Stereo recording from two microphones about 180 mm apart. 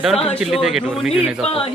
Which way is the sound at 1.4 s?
30° left (ahead or behind).